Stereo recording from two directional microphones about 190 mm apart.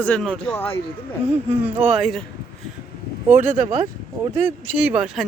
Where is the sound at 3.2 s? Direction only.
10° right (ahead or behind).